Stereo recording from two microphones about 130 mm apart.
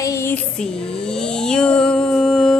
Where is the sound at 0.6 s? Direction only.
5° left (ahead or behind).